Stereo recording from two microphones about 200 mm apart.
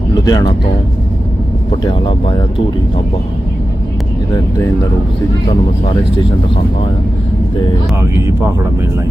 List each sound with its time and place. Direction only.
0.3 s speech: 20° left (ahead or behind)
1.8 s speech: 25° left (ahead or behind)